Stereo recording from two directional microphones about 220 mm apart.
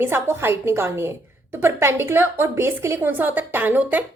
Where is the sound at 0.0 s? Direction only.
10° right (ahead or behind).